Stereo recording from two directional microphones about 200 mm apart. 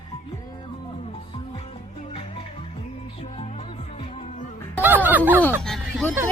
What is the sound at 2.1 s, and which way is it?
Music, 25° left (ahead or behind).